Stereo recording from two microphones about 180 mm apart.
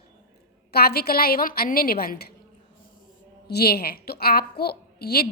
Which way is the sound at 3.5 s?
60° left (ahead or behind).